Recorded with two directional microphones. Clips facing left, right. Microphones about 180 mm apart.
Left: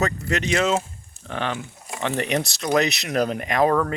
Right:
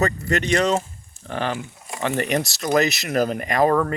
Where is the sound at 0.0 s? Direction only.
Centre (ahead or behind).